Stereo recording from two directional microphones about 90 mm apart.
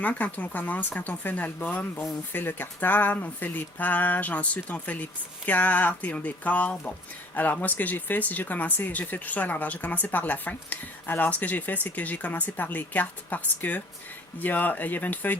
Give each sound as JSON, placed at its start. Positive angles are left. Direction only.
{"t": 0.0, "sound": "speech", "side_deg": 15}